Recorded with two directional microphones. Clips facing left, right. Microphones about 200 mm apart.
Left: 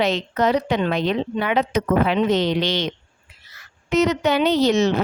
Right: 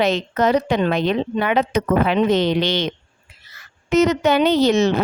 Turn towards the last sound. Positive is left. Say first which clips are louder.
# right 2 dB
turn(degrees=-55)  # may be behind; listen again after turning